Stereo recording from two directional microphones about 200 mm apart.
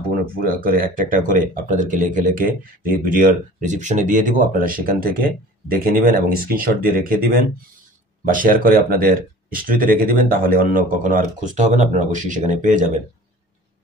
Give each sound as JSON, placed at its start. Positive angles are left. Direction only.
{"t": 0.4, "sound": "speech", "side_deg": -45}